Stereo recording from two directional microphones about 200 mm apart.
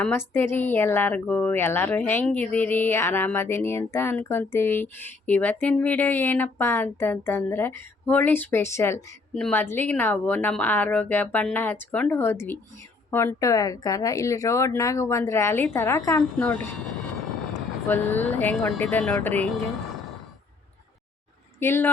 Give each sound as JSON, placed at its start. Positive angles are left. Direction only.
{"t": 0.0, "sound": "a woman's voice", "side_deg": 10}
{"t": 17.8, "sound": "a woman's voice", "side_deg": 10}
{"t": 21.6, "sound": "a woman's voice", "side_deg": 10}